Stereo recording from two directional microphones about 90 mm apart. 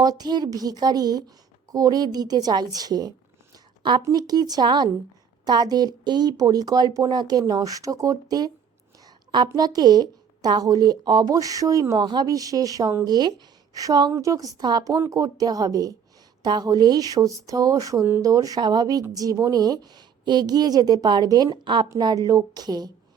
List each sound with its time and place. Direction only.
0.0 s a woman's voice: 45° right (ahead or behind)
9.0 s a sound: 55° right (ahead or behind)
9.5 s a woman's voice: 45° right (ahead or behind)
13.1 s a woman's voice: 50° right (ahead or behind)